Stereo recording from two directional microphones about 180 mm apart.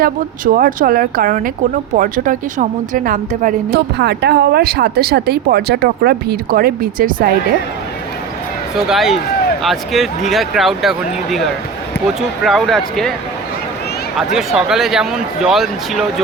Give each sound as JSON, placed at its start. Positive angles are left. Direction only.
{"t": 0.0, "sound": "a woman's voice", "side_deg": -50}
{"t": 8.7, "sound": "speech", "side_deg": 0}
{"t": 14.3, "sound": "speech", "side_deg": 0}